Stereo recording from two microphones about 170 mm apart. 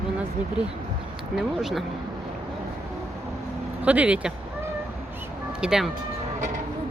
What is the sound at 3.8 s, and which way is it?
Speech, 10° right (ahead or behind).